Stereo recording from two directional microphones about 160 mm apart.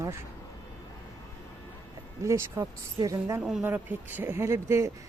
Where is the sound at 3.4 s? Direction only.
5° right (ahead or behind).